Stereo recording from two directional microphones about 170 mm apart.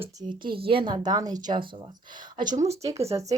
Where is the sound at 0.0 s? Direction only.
25° right (ahead or behind).